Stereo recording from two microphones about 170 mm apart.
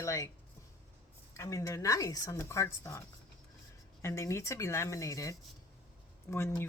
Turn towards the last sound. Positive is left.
turn(degrees=15)  # may be behind; listen again after turning